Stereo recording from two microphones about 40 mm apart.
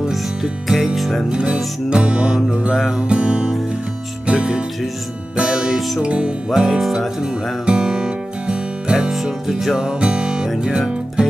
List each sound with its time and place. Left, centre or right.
0.1 s music: centre
1.3 s music: right
5.4 s music: right
6.8 s speech: centre
7.2 s music: right
9.1 s speech: centre
9.8 s music: right